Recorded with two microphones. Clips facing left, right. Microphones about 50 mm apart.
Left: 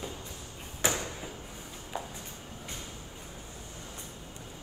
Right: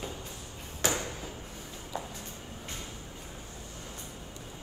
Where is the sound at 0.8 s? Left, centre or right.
Left.